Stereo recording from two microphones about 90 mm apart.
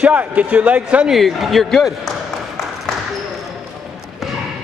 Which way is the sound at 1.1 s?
Centre (ahead or behind).